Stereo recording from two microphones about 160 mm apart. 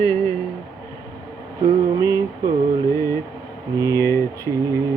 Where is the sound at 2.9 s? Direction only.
20° left (ahead or behind).